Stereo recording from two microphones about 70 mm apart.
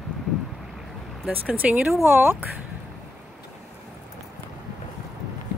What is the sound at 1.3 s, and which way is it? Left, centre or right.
Speech, right.